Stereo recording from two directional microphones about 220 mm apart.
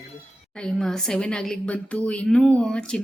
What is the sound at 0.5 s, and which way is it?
A woman's voice, 5° left (ahead or behind).